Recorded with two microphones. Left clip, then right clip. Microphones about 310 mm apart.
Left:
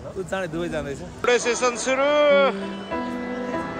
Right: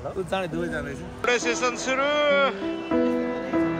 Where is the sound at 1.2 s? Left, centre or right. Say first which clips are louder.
Left 3 dB; centre.